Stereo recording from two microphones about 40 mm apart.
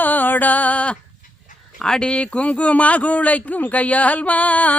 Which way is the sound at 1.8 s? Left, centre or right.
Left.